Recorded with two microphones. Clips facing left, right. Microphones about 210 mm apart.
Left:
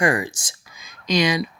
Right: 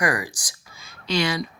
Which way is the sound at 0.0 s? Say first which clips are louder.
Left 4 dB; 25° left (ahead or behind).